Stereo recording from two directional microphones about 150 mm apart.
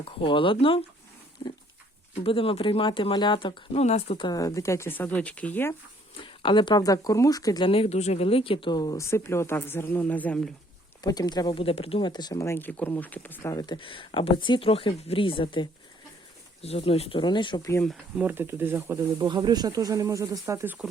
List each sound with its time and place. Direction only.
0.0 s speech: 35° left (ahead or behind)
1.4 s pig: 30° left (ahead or behind)
2.2 s speech: 35° left (ahead or behind)
4.2 s speech: 25° left (ahead or behind)
6.2 s speech: 35° left (ahead or behind)
7.7 s speech: 40° left (ahead or behind); by 10.5 s 10° left (ahead or behind)
11.0 s speech: 25° left (ahead or behind)
17.8 s speech: centre (ahead or behind)
18.3 s speech: 15° right (ahead or behind)
19.2 s speech: 30° right (ahead or behind)